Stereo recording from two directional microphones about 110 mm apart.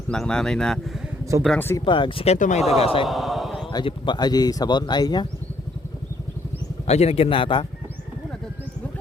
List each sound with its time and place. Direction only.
0.1 s speech: 5° left (ahead or behind)
1.5 s speech: 20° left (ahead or behind)
1.8 s speech: 50° left (ahead or behind)
2.2 s speech: 75° left (ahead or behind); by 3.1 s 60° left (ahead or behind)
3.1 s a sound: centre (ahead or behind)
3.8 s speech: 45° left (ahead or behind)
6.8 s a man's voice: 75° left (ahead or behind); by 7.6 s 50° left (ahead or behind)